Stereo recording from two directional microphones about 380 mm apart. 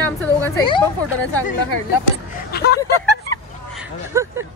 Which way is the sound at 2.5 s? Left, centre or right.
Left.